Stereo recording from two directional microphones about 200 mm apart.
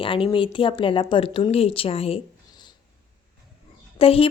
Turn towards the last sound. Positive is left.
turn(degrees=30)  # may be behind; listen again after turning